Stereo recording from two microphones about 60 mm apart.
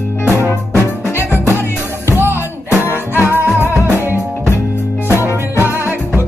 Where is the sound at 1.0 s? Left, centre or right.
Left.